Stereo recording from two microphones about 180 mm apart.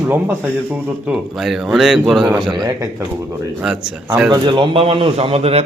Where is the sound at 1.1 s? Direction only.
Centre (ahead or behind).